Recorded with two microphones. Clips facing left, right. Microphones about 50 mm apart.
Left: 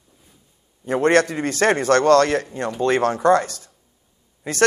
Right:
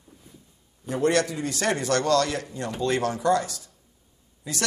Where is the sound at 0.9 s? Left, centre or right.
Left.